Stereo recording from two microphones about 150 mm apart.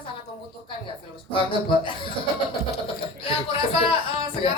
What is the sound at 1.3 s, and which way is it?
Speech, 35° left (ahead or behind).